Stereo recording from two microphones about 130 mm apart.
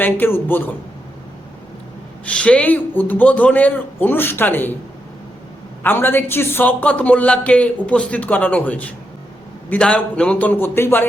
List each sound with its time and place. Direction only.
0.0 s a man's voice: 15° left (ahead or behind)
2.2 s a man's voice: 10° left (ahead or behind)
5.8 s a man's voice: 15° left (ahead or behind)